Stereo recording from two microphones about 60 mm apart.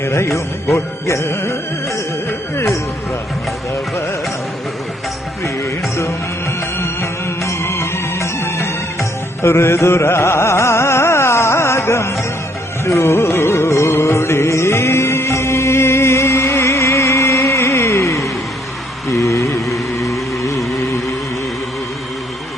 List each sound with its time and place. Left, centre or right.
0.0 s music: left
6.7 s music: left
9.4 s carnatic music: left
13.0 s music: left
19.5 s a sound: centre